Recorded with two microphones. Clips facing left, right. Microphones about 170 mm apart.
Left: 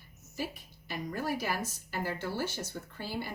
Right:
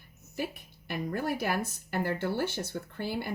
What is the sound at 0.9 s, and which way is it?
A woman's voice, 55° right (ahead or behind).